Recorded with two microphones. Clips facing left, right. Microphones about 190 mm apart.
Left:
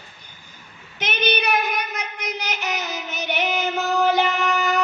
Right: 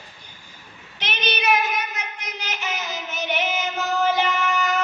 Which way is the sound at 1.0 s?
55° left (ahead or behind).